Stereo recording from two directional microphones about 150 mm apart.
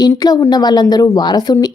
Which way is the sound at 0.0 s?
25° left (ahead or behind).